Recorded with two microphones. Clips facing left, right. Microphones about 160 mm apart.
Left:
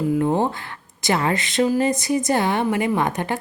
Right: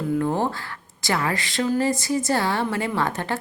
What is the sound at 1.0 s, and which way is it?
Speech, 20° left (ahead or behind).